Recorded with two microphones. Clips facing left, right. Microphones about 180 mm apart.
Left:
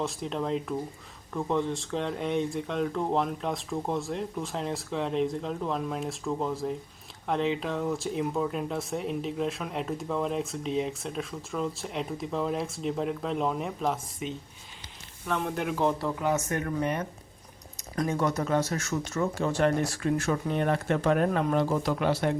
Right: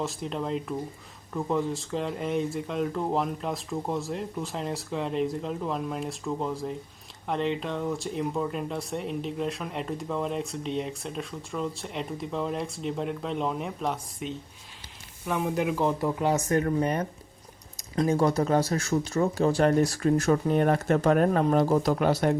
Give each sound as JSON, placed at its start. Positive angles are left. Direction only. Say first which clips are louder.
{"t": 0.0, "sound": "speech", "louder": "even", "side_deg": 0}
{"t": 16.2, "sound": "speech", "louder": "right 4 dB", "side_deg": -35}